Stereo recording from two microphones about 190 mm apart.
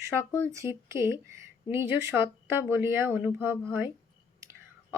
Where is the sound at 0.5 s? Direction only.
15° right (ahead or behind).